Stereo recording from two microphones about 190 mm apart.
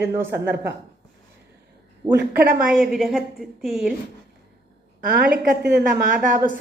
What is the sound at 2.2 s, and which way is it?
Speech, 55° right (ahead or behind).